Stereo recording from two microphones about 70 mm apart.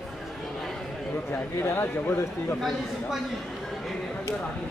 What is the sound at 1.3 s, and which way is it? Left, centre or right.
Speech, left.